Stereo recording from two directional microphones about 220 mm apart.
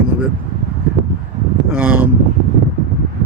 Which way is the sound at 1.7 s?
10° right (ahead or behind).